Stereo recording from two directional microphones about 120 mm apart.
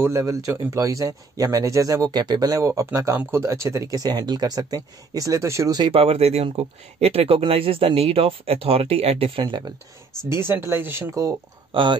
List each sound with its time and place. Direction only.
0.0 s a man's voice: 25° right (ahead or behind)
5.8 s speech: 50° right (ahead or behind)
10.3 s a man's voice: 20° right (ahead or behind)
11.7 s speech: 45° right (ahead or behind)